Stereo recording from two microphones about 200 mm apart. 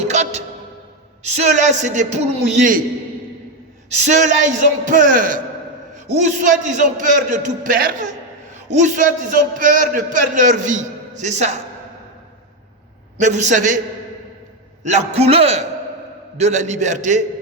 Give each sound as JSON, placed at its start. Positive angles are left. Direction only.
{"t": 0.0, "sound": "music", "side_deg": -35}
{"t": 1.4, "sound": "a man's voice", "side_deg": -35}
{"t": 4.0, "sound": "a man's voice", "side_deg": -35}
{"t": 13.1, "sound": "a man's voice", "side_deg": -35}
{"t": 14.8, "sound": "a man's voice", "side_deg": -35}